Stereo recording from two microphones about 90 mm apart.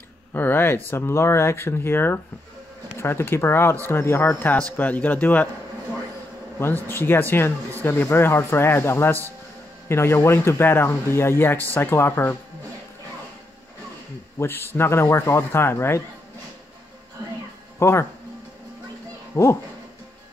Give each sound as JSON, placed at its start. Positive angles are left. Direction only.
{"t": 0.3, "sound": "speech", "side_deg": 25}
{"t": 6.6, "sound": "speech", "side_deg": 25}
{"t": 14.4, "sound": "speech", "side_deg": 25}
{"t": 17.7, "sound": "speech", "side_deg": 30}
{"t": 19.3, "sound": "speech", "side_deg": 30}